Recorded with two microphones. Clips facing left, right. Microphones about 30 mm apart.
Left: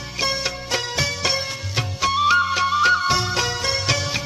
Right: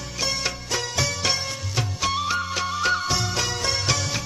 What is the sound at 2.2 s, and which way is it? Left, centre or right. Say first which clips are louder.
Music: left 8 dB; left.